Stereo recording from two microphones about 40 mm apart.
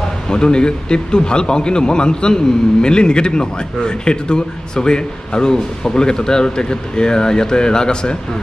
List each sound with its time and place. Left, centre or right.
0.3 s a man's voice: left